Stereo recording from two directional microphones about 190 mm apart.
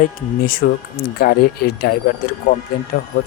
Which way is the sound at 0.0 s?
50° left (ahead or behind).